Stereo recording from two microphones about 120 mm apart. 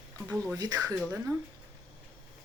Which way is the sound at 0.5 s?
30° right (ahead or behind).